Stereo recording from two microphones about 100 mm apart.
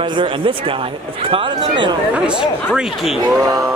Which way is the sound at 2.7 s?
5° right (ahead or behind).